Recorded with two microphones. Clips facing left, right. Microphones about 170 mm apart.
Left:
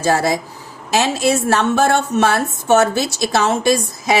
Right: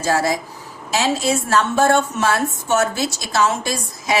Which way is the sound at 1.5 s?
70° left (ahead or behind).